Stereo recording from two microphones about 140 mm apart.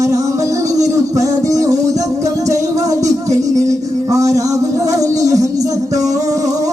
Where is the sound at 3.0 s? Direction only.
55° right (ahead or behind).